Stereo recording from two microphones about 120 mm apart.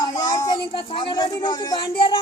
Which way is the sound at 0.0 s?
30° left (ahead or behind).